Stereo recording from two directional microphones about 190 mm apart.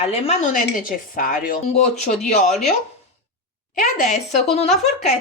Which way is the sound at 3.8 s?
35° left (ahead or behind).